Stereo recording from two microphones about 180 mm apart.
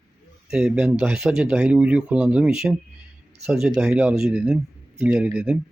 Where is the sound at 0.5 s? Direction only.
5° right (ahead or behind).